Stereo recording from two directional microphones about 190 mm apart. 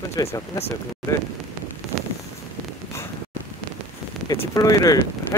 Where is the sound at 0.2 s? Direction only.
20° left (ahead or behind).